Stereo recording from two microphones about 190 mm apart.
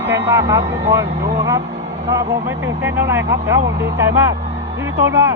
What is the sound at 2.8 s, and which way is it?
Speech, 10° right (ahead or behind).